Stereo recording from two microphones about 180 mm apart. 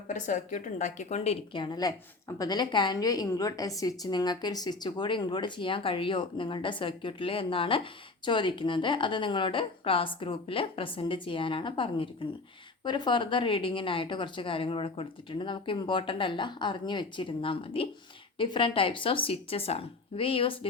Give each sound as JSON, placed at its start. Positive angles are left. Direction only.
{"t": 0.1, "sound": "a woman's voice", "side_deg": 45}